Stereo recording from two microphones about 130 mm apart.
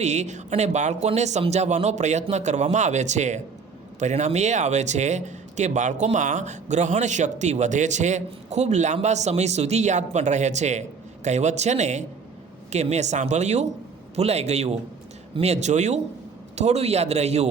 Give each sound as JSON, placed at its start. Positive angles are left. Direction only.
{"t": 0.0, "sound": "speech", "side_deg": -60}